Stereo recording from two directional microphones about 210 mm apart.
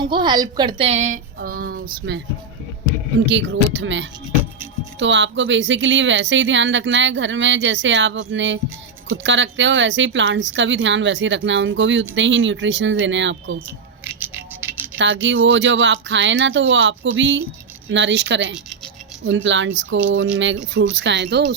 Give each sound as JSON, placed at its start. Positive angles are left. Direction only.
{"t": 0.0, "sound": "a woman's voice", "side_deg": -20}
{"t": 1.4, "sound": "speech", "side_deg": -45}
{"t": 3.2, "sound": "speech", "side_deg": -60}
{"t": 14.0, "sound": "a sound", "side_deg": -10}
{"t": 14.9, "sound": "speech", "side_deg": -60}